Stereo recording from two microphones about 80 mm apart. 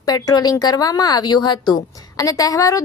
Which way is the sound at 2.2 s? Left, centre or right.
Left.